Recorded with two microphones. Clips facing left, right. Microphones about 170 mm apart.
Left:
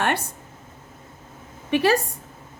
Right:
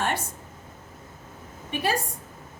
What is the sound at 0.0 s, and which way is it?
Speech, 65° left (ahead or behind).